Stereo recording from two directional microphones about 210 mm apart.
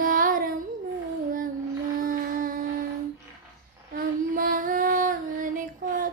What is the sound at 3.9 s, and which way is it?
Female singing, 45° right (ahead or behind).